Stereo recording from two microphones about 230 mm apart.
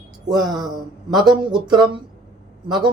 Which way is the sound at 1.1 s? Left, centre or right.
Centre.